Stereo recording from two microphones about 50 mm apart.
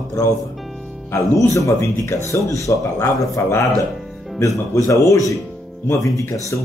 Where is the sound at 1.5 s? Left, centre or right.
Left.